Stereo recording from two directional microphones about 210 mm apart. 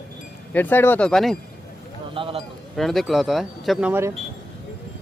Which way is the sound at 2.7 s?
Centre (ahead or behind).